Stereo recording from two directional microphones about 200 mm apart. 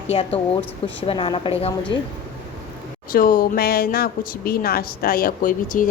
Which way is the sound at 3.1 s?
45° left (ahead or behind).